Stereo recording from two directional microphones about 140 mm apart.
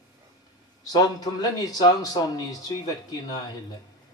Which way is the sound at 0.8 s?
30° left (ahead or behind).